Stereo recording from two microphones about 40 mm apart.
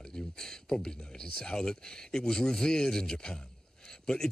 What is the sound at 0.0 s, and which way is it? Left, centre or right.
Speech, centre.